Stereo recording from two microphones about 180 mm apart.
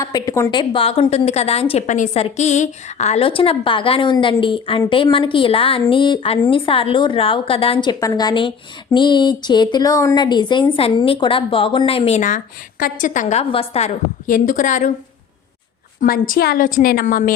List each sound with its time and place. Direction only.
0.0 s a woman's voice: 20° left (ahead or behind); by 13.4 s 45° left (ahead or behind)
13.4 s a woman's voice: 30° left (ahead or behind)
14.3 s a woman's voice: 50° left (ahead or behind)
16.0 s a woman's voice: 50° left (ahead or behind)